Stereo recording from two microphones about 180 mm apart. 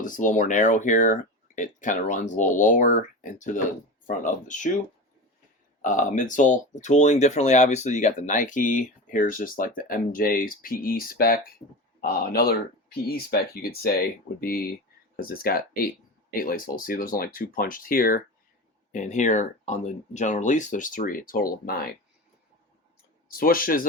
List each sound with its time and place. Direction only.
0.0 s speech: 45° left (ahead or behind)
5.8 s speech: 45° left (ahead or behind)
23.3 s speech: 50° left (ahead or behind)